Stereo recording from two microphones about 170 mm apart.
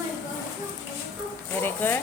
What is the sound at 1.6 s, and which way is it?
Speech, 10° left (ahead or behind).